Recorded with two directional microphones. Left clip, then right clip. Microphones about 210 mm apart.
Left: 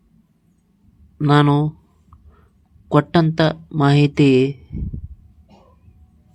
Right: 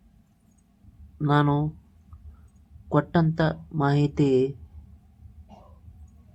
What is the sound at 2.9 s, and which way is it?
Speech, 30° left (ahead or behind).